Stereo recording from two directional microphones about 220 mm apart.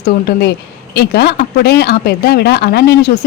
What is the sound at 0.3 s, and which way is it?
Speech, 45° left (ahead or behind).